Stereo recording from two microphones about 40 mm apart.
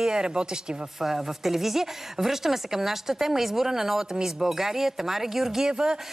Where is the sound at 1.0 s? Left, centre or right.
Centre.